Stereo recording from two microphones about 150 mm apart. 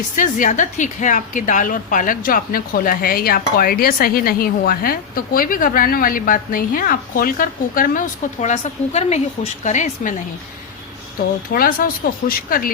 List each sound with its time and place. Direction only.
0.2 s a woman's voice: 60° left (ahead or behind)
11.2 s a woman's voice: 85° left
11.5 s a woman's voice: 70° left (ahead or behind)